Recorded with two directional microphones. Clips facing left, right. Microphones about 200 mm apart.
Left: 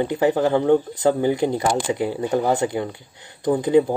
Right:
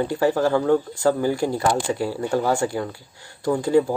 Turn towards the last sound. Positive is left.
turn(degrees=20)  # may be behind; listen again after turning